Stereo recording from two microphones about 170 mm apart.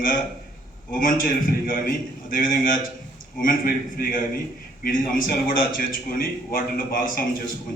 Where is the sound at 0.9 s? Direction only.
55° left (ahead or behind).